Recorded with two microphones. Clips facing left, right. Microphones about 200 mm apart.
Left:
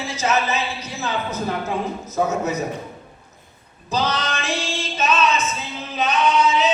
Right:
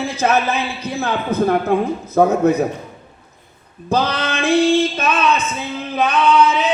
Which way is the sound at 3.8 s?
55° right (ahead or behind).